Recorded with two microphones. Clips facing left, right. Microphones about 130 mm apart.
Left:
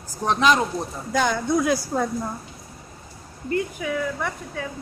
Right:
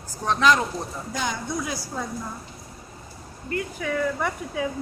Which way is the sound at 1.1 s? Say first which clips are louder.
Left 8 dB; 60° left (ahead or behind).